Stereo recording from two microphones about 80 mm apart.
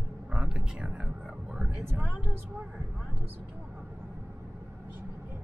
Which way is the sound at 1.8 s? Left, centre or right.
Right.